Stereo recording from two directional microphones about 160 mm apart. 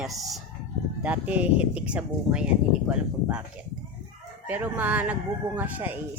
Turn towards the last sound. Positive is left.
turn(degrees=-10)  # may be behind; listen again after turning